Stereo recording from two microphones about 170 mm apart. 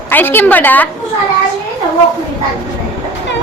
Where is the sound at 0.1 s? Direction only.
10° left (ahead or behind).